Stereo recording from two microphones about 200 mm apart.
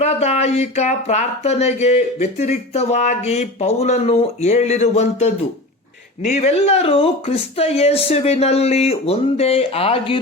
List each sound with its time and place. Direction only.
0.0 s speech: 30° left (ahead or behind)